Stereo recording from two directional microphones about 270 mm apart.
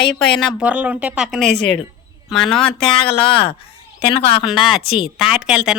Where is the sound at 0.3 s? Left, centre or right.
Centre.